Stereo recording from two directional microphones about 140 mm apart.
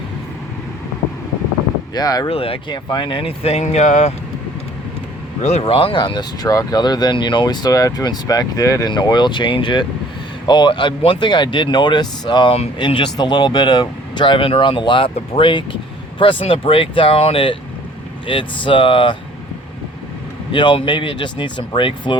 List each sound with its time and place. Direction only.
1.9 s speech: 30° left (ahead or behind)
2.3 s speech: 40° left (ahead or behind); by 4.1 s 60° left (ahead or behind)
5.4 s speech: 55° left (ahead or behind); by 19.1 s 35° left (ahead or behind)
20.5 s speech: 35° left (ahead or behind)